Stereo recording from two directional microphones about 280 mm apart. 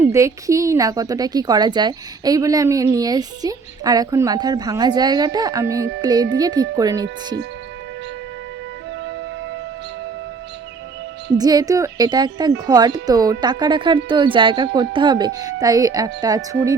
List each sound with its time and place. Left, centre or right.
0.1 s a woman's voice: centre
11.3 s a woman's voice: centre